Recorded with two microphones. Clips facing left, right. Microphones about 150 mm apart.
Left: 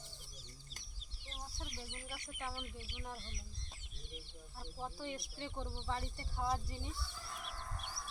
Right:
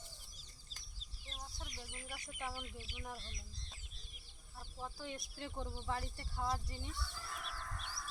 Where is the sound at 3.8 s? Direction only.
75° left (ahead or behind).